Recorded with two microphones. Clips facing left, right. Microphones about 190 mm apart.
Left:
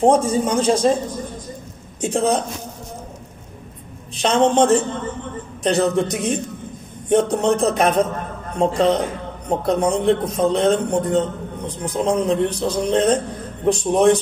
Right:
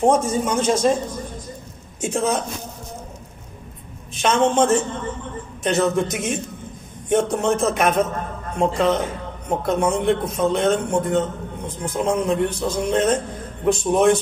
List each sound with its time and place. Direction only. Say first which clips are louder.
0.0 s a man's voice: left 2 dB; 30° left (ahead or behind)
2.0 s a man's voice: left 3 dB; 35° left (ahead or behind)
4.2 s a man's voice: left 2 dB; 35° left (ahead or behind)